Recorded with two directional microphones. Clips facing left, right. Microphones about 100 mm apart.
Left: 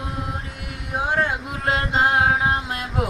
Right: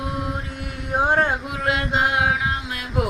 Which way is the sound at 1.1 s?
35° right (ahead or behind).